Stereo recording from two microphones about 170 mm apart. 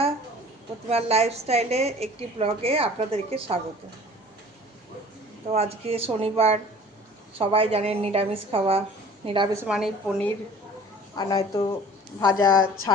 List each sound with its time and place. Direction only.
0.9 s a woman's voice: 35° right (ahead or behind)
5.5 s a woman's voice: 40° right (ahead or behind)
9.6 s a woman's voice: 5° right (ahead or behind)
11.1 s a woman's voice: 25° left (ahead or behind)